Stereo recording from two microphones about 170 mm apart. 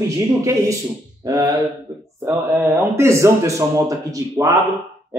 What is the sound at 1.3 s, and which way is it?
Mantra, 20° right (ahead or behind).